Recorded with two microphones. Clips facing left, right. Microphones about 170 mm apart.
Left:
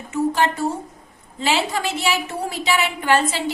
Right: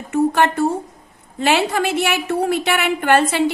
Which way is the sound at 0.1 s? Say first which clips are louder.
Right 4 dB; 60° right (ahead or behind).